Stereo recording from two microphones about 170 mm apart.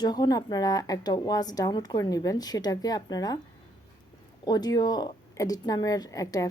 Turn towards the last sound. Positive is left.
turn(degrees=20)  # may be behind; listen again after turning